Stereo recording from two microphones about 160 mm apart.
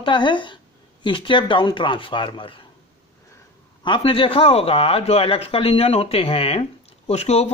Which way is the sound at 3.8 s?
30° left (ahead or behind).